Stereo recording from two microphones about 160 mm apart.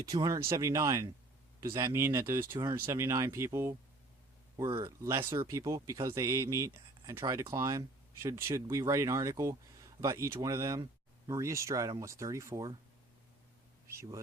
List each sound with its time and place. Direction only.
0.0 s speech: 25° right (ahead or behind)
13.8 s speech: 15° right (ahead or behind)